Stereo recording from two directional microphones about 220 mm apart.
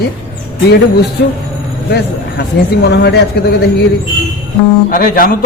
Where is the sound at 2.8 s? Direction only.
50° left (ahead or behind).